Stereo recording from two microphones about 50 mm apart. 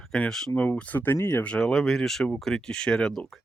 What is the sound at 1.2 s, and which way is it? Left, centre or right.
Speech, left.